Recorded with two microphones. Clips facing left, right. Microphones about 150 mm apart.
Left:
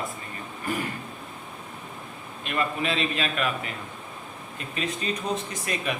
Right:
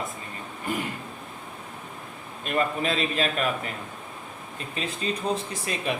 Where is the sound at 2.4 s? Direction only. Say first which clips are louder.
Right 2 dB; 35° right (ahead or behind).